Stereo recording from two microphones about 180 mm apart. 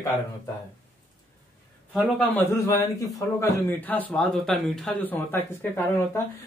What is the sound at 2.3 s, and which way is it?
A man's voice, 15° left (ahead or behind).